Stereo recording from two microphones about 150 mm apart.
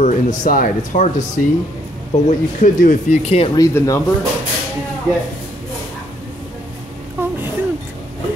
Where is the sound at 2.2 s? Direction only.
55° left (ahead or behind).